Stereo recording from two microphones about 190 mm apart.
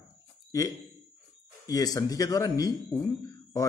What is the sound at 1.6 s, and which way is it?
A man's voice, 20° left (ahead or behind).